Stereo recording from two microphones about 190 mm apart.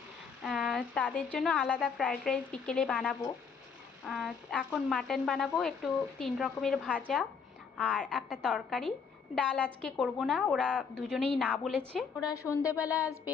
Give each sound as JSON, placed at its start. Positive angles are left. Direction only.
{"t": 0.4, "sound": "speech", "side_deg": 0}
{"t": 12.2, "sound": "a woman's voice", "side_deg": 15}